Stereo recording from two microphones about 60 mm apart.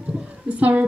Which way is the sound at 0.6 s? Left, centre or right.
Right.